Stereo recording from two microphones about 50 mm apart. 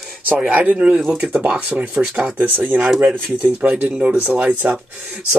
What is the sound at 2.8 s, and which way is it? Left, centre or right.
Speech, right.